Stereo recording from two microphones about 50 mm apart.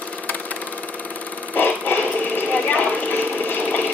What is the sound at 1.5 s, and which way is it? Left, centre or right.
Vehicle, left.